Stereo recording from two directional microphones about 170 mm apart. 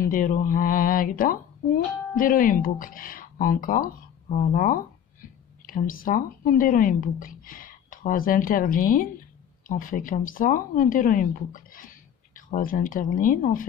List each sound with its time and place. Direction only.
0.0 s a woman's voice: 55° left (ahead or behind)